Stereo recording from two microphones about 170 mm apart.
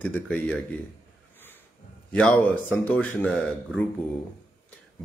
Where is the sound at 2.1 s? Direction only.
5° left (ahead or behind).